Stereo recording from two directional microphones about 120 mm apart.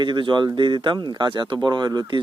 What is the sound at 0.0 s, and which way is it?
Speech, 40° right (ahead or behind).